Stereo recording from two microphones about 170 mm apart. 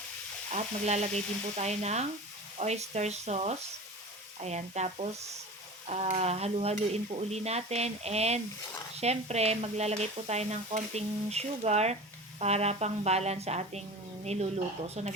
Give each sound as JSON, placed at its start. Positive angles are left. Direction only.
{"t": 0.5, "sound": "speech", "side_deg": -40}